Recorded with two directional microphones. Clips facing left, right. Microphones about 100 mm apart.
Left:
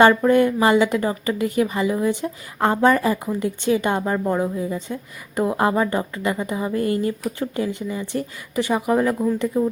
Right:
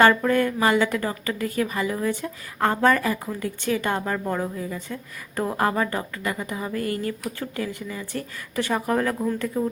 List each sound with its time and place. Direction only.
0.0 s a woman's voice: 20° left (ahead or behind)